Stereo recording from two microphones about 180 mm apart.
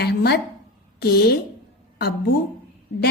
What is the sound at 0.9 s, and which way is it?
Speech, 60° left (ahead or behind).